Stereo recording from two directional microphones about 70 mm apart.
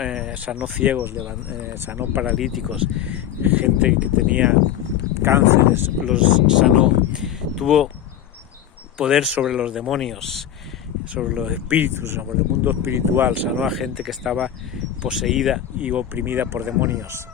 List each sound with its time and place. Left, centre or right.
0.0 s speech: centre; by 2.2 s right
2.3 s speech: centre
3.0 s speech: right
5.2 s speech: right
6.1 s speech: centre
9.0 s speech: centre
10.0 s speech: centre
11.1 s speech: centre
13.7 s speech: centre
15.8 s speech: right